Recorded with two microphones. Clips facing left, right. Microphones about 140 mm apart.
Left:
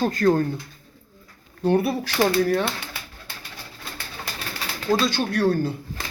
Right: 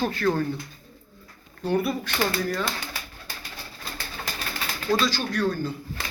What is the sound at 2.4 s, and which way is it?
Speech, 65° left (ahead or behind).